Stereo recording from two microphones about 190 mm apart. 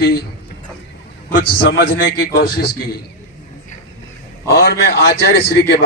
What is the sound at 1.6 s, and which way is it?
A man's voice, 55° left (ahead or behind).